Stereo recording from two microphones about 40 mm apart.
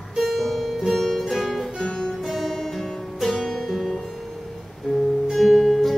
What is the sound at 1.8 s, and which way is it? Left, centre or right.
Music, centre.